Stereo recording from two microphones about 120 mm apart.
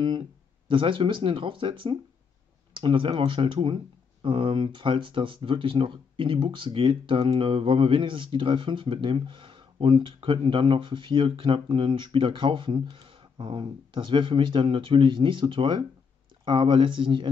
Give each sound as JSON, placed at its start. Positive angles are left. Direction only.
{"t": 0.0, "sound": "speech", "side_deg": -40}